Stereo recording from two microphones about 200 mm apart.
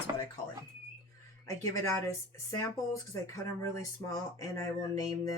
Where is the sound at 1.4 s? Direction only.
15° left (ahead or behind).